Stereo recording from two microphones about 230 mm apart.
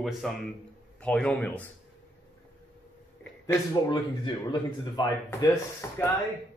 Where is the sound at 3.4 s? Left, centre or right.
Centre.